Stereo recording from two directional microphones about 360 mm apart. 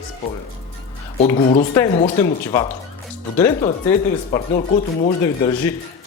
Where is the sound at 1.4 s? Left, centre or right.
Centre.